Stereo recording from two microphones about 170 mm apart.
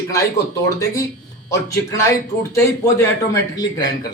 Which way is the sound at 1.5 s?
20° left (ahead or behind).